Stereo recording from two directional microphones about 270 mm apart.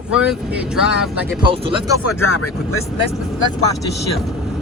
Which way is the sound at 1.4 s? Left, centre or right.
Centre.